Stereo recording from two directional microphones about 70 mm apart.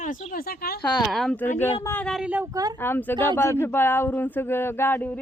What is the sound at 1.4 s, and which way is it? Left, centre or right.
Speech, left.